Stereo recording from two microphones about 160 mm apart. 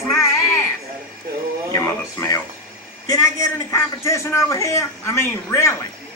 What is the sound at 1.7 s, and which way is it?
A man's voice, 20° left (ahead or behind).